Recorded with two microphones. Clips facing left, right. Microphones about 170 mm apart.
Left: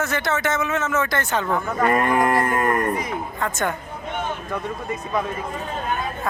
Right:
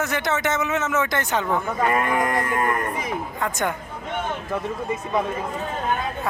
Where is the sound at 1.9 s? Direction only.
45° left (ahead or behind).